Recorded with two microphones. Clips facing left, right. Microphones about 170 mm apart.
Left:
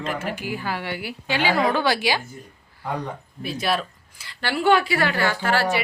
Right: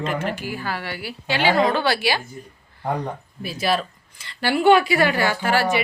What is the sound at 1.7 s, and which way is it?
Speech, 15° left (ahead or behind).